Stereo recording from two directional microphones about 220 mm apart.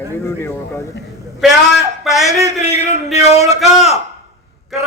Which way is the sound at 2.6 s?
30° left (ahead or behind).